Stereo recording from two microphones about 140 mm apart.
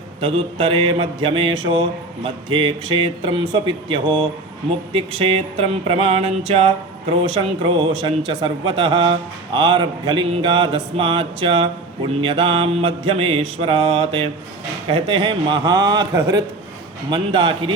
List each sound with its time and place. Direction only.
0.2 s a man's voice: 40° right (ahead or behind)
4.9 s a sound: 40° right (ahead or behind)
7.3 s a man's voice: 35° right (ahead or behind)